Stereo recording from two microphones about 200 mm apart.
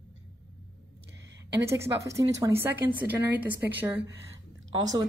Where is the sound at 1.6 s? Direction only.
15° right (ahead or behind).